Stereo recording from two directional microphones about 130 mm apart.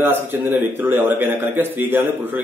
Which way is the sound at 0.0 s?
15° right (ahead or behind).